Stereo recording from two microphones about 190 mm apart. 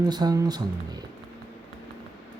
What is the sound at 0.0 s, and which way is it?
Speech, 20° right (ahead or behind).